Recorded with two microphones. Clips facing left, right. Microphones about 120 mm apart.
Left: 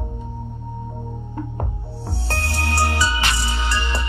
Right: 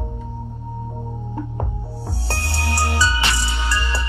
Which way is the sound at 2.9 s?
20° left (ahead or behind).